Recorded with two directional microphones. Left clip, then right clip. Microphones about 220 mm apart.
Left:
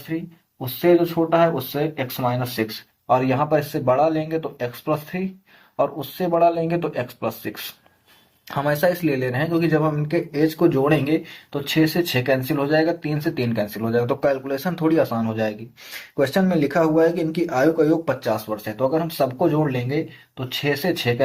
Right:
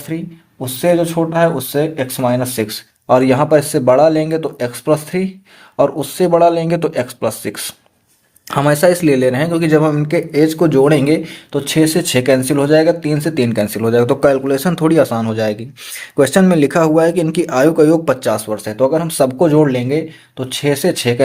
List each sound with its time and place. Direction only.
0.6 s a man's voice: 45° right (ahead or behind)